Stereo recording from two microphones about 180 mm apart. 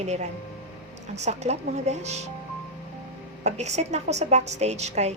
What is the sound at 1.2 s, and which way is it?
Speech, 40° right (ahead or behind).